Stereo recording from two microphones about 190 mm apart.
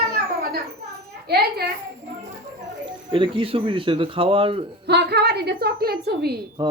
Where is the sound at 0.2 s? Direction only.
50° right (ahead or behind).